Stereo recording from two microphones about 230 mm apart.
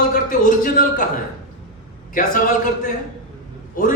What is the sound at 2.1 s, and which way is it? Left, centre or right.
Speech, left.